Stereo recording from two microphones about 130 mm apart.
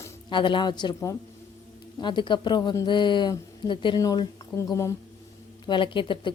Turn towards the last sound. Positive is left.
turn(degrees=40)  # may be behind; listen again after turning